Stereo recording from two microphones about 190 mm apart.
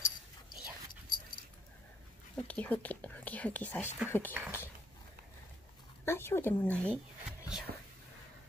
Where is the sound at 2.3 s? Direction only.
5° left (ahead or behind).